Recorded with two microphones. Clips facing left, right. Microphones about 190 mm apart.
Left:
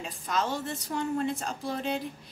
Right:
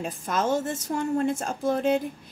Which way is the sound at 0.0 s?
50° right (ahead or behind).